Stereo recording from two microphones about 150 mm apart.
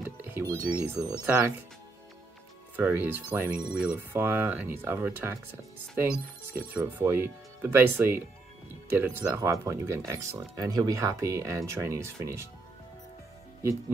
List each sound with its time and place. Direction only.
0.0 s speech: 15° right (ahead or behind)
2.7 s speech: 10° right (ahead or behind)